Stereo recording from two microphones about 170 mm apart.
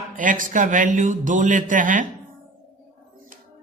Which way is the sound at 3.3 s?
50° right (ahead or behind).